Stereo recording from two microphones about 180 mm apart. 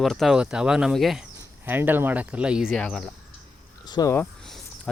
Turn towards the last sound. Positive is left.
turn(degrees=20)  # may be behind; listen again after turning